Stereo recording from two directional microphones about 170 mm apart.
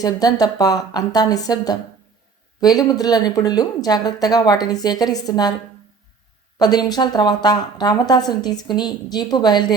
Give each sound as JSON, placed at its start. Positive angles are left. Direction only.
{"t": 0.0, "sound": "a woman's voice", "side_deg": 20}
{"t": 6.6, "sound": "a woman's voice", "side_deg": 25}